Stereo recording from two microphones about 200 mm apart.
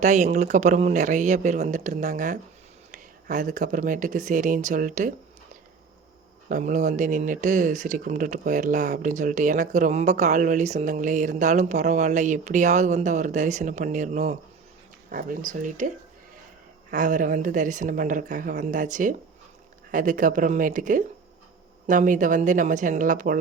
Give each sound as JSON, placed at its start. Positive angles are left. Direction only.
{"t": 0.0, "sound": "speech", "side_deg": -35}
{"t": 6.5, "sound": "speech", "side_deg": -40}
{"t": 16.9, "sound": "speech", "side_deg": -40}